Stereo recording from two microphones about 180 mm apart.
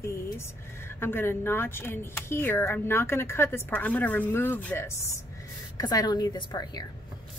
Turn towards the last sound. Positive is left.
turn(degrees=20)  # may be behind; listen again after turning